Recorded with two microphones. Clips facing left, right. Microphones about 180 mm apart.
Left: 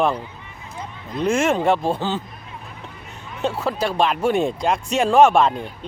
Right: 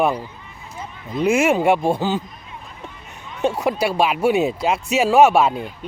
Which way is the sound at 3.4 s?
15° right (ahead or behind).